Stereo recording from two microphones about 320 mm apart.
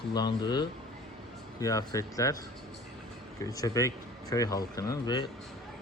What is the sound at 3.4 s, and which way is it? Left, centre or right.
Speech, centre.